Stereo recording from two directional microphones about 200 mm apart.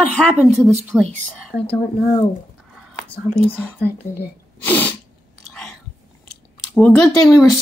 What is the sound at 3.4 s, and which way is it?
Speech, 10° left (ahead or behind).